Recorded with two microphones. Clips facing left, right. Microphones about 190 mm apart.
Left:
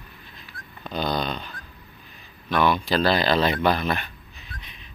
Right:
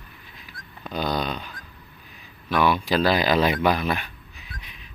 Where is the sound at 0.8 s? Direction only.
10° right (ahead or behind).